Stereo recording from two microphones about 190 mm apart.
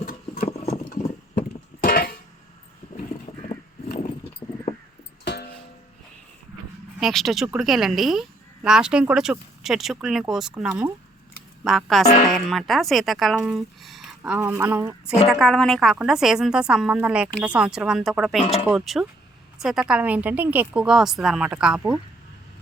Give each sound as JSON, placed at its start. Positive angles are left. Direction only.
{"t": 0.0, "sound": "engine", "side_deg": 50}
{"t": 1.4, "sound": "music", "side_deg": 50}
{"t": 4.4, "sound": "a sound", "side_deg": 15}
{"t": 5.2, "sound": "music", "side_deg": 60}
{"t": 7.0, "sound": "speech", "side_deg": 0}
{"t": 10.7, "sound": "speech", "side_deg": -15}
{"t": 11.6, "sound": "speech", "side_deg": 0}
{"t": 15.3, "sound": "speech", "side_deg": 0}